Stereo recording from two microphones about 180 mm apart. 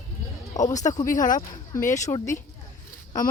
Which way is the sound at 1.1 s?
45° left (ahead or behind).